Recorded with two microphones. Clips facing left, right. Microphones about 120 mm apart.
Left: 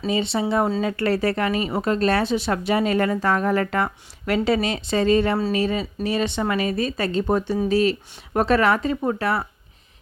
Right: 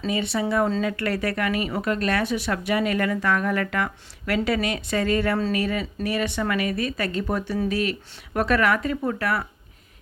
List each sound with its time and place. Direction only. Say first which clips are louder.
0.1 s speech: left 2 dB; 25° left (ahead or behind)